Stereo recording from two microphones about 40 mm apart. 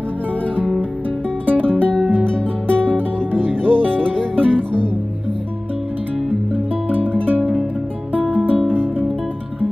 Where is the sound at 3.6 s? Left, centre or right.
Right.